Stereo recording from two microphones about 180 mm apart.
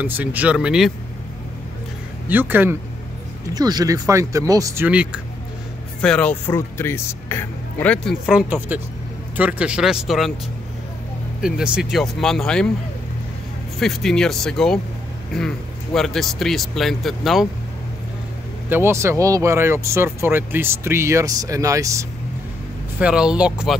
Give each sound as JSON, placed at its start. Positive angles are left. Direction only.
{"t": 0.0, "sound": "speech", "side_deg": -10}
{"t": 2.2, "sound": "speech", "side_deg": -10}
{"t": 3.5, "sound": "speech", "side_deg": -20}
{"t": 5.9, "sound": "speech", "side_deg": 5}
{"t": 11.4, "sound": "speech", "side_deg": -5}
{"t": 13.7, "sound": "speech", "side_deg": 0}
{"t": 18.7, "sound": "speech", "side_deg": -15}
{"t": 22.9, "sound": "speech", "side_deg": -5}